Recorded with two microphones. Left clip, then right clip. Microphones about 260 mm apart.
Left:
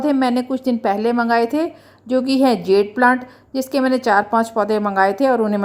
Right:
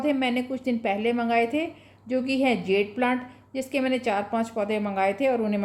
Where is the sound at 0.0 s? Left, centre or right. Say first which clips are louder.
Left 7 dB; left.